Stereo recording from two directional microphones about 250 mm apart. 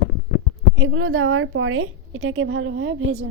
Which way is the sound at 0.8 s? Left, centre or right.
Right.